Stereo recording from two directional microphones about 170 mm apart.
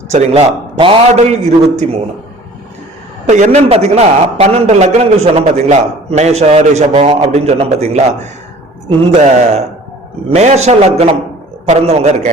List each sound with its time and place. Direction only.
0.1 s a man's voice: 40° right (ahead or behind)
3.2 s a man's voice: 45° right (ahead or behind)